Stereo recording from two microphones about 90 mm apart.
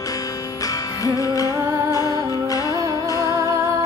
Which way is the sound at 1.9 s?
40° left (ahead or behind).